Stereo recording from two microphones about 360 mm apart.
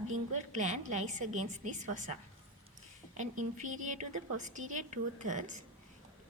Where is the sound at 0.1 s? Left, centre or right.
Centre.